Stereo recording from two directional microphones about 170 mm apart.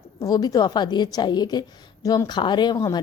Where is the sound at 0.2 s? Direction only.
20° left (ahead or behind).